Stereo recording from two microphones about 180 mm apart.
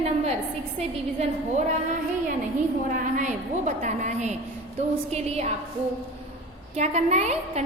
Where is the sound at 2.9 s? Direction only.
45° right (ahead or behind).